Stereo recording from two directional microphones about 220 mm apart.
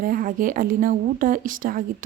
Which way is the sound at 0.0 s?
40° right (ahead or behind).